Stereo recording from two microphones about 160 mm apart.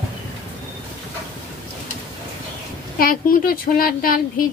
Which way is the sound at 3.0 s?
65° left (ahead or behind).